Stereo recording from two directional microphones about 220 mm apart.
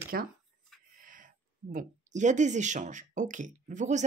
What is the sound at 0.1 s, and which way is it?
Speech, 40° right (ahead or behind).